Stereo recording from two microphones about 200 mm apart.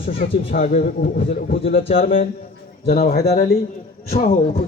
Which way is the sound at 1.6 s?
30° left (ahead or behind).